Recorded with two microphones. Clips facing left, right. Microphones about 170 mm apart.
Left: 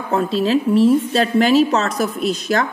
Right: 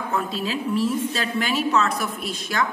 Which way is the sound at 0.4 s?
40° left (ahead or behind).